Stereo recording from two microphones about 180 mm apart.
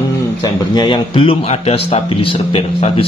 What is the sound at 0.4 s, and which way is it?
A man's voice, 25° left (ahead or behind).